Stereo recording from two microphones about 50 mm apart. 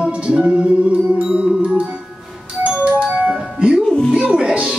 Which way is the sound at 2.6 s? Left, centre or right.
Right.